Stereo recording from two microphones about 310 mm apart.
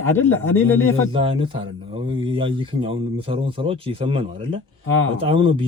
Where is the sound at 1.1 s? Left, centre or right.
Centre.